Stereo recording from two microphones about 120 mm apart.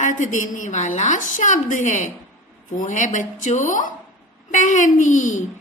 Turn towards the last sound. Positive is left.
turn(degrees=90)